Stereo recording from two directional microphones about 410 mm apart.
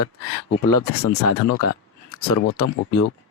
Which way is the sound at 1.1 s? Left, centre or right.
Left.